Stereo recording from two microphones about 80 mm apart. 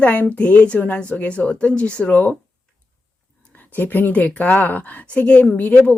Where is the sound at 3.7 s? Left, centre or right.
Left.